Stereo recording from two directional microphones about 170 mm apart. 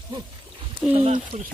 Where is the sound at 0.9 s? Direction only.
40° right (ahead or behind).